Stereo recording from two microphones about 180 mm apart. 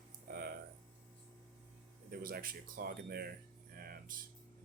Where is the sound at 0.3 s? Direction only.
55° right (ahead or behind).